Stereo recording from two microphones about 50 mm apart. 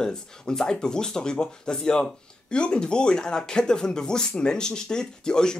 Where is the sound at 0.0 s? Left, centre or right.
Centre.